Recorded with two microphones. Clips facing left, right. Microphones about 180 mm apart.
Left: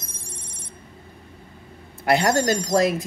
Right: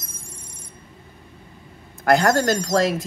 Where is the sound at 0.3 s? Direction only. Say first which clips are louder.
Left 2 dB; 90° left.